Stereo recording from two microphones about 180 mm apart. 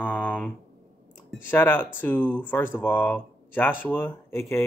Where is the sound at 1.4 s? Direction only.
10° left (ahead or behind).